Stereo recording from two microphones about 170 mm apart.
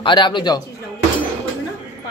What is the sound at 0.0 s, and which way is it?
Speech, 25° left (ahead or behind).